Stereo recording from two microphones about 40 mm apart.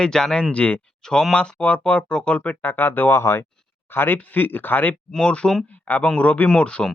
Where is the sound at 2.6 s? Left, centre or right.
Left.